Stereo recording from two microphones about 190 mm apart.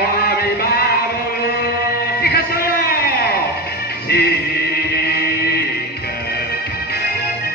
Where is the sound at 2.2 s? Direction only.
55° left (ahead or behind).